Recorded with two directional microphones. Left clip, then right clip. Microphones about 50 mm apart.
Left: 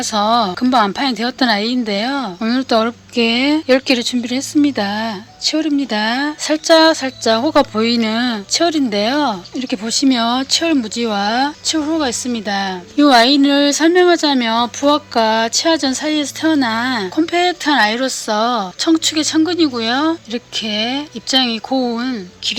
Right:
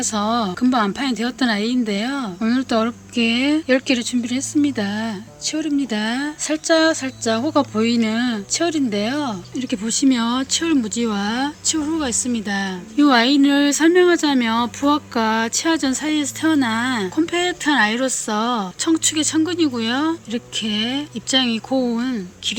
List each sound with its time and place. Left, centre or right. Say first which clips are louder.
0.0 s speech: left 6 dB; right
9.6 s speech: right 1 dB; right